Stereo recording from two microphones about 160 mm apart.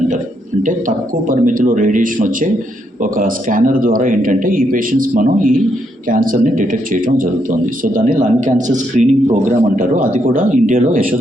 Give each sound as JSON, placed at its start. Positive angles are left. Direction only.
{"t": 0.6, "sound": "a man's voice", "side_deg": -55}